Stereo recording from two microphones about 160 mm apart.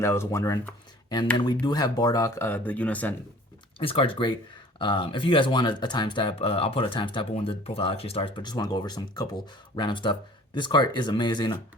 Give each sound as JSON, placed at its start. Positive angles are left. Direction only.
{"t": 0.0, "sound": "speech", "side_deg": 15}
{"t": 3.8, "sound": "speech", "side_deg": 35}